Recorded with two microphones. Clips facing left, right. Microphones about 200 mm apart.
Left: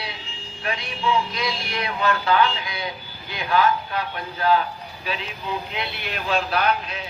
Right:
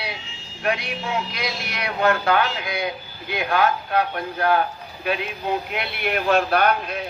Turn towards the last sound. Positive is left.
turn(degrees=-55)  # may be behind; listen again after turning